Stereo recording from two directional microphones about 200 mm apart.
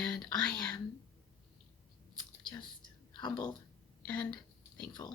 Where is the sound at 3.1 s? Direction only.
20° left (ahead or behind).